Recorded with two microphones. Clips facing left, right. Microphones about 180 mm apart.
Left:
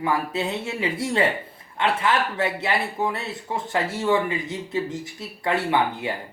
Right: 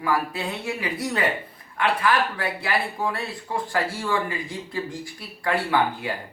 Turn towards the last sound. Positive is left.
turn(degrees=25)  # may be behind; listen again after turning